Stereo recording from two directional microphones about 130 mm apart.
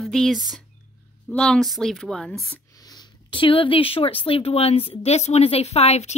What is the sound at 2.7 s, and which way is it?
Speech, 30° left (ahead or behind).